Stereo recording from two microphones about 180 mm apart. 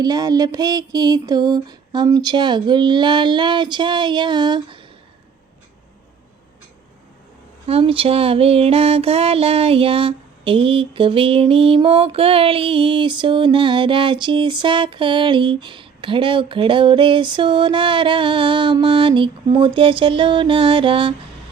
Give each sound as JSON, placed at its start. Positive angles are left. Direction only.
{"t": 0.0, "sound": "music", "side_deg": -20}
{"t": 7.7, "sound": "music", "side_deg": -30}